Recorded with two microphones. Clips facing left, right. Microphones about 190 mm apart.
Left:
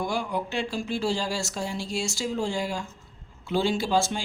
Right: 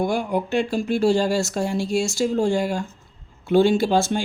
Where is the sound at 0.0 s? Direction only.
55° right (ahead or behind).